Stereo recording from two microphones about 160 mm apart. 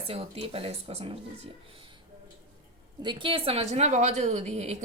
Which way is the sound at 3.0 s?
30° right (ahead or behind).